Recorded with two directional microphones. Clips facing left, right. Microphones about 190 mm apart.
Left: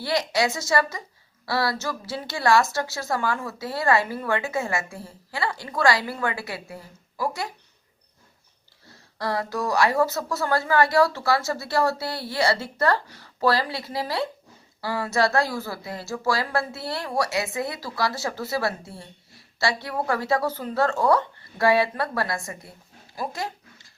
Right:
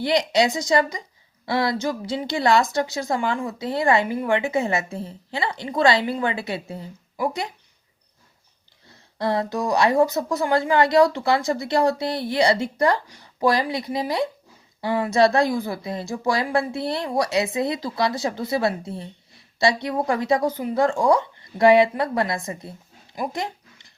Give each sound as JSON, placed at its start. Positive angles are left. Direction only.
{"t": 0.0, "sound": "speech", "side_deg": -20}
{"t": 9.1, "sound": "speech", "side_deg": -20}
{"t": 23.1, "sound": "dog", "side_deg": -15}